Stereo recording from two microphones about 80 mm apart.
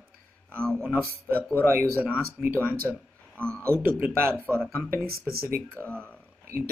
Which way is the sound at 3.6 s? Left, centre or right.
Right.